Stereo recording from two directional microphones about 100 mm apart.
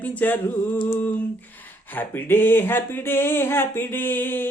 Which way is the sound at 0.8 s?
25° left (ahead or behind).